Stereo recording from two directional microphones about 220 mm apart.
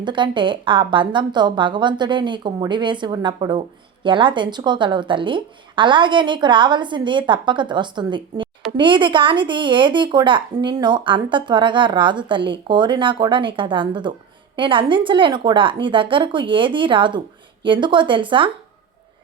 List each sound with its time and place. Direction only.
0.0 s speech: 20° right (ahead or behind)